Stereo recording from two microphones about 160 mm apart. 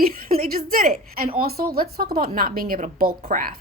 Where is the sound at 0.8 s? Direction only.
55° right (ahead or behind).